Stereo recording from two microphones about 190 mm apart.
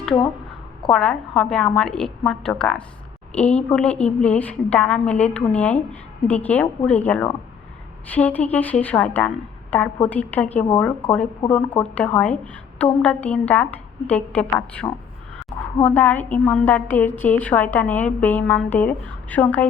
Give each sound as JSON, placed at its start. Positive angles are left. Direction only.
{"t": 0.8, "sound": "a woman's voice", "side_deg": 5}
{"t": 14.8, "sound": "a woman's voice", "side_deg": 20}